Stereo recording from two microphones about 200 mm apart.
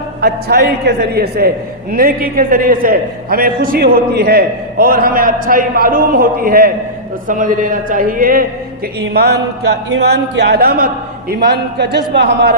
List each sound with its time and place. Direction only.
0.2 s a man's voice: 50° right (ahead or behind)